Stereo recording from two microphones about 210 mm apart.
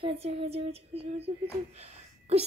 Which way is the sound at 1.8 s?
30° right (ahead or behind).